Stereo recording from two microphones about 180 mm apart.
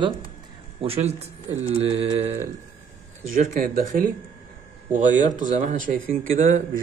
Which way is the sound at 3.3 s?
50° right (ahead or behind).